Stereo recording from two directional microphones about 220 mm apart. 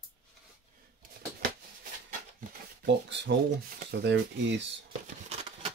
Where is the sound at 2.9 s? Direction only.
55° right (ahead or behind).